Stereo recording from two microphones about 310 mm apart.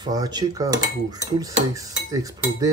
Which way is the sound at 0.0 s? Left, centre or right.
Centre.